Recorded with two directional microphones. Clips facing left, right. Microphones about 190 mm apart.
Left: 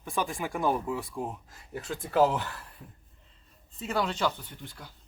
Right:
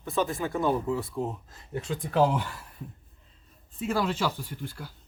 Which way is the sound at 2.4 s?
10° right (ahead or behind).